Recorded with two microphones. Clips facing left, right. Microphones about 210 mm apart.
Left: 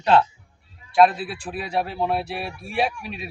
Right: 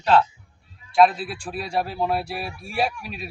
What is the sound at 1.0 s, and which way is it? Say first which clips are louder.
A man's voice: even; 5° left (ahead or behind).